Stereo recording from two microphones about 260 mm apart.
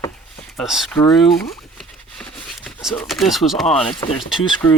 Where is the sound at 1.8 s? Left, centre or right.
Centre.